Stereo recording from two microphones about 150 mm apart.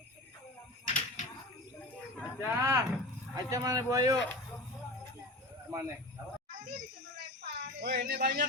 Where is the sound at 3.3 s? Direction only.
25° right (ahead or behind).